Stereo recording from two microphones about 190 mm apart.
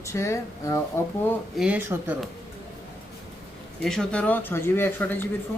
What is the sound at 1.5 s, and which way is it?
Speech, 5° right (ahead or behind).